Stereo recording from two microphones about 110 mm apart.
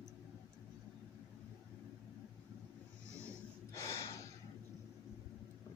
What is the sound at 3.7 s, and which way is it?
Gasp, 25° left (ahead or behind).